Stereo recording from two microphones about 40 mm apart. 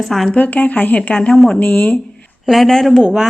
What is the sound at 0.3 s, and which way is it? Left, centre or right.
Speech, left.